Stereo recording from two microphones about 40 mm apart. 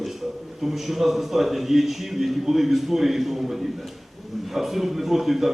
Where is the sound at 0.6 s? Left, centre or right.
Centre.